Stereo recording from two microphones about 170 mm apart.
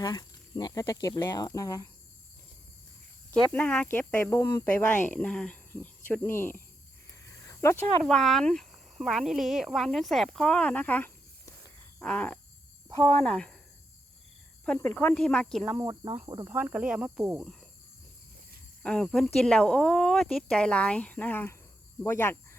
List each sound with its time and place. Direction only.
0.0 s speech: 25° left (ahead or behind)
3.5 s speech: 10° left (ahead or behind)
8.0 s speech: centre (ahead or behind)
11.9 s groan: 10° left (ahead or behind)
13.1 s speech: 5° left (ahead or behind)
14.6 s speech: 10° left (ahead or behind)
16.2 s speech: 25° right (ahead or behind)
16.5 s speech: 10° right (ahead or behind)
18.8 s speech: 5° left (ahead or behind)